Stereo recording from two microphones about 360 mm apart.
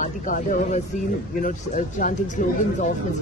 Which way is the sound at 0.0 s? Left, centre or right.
Left.